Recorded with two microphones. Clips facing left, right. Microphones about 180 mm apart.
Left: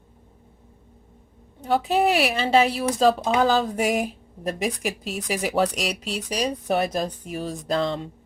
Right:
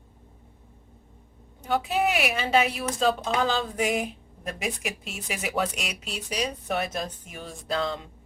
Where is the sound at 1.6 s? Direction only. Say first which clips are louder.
Left 4 dB; 35° left (ahead or behind).